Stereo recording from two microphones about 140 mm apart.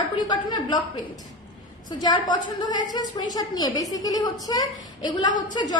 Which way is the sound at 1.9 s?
30° left (ahead or behind).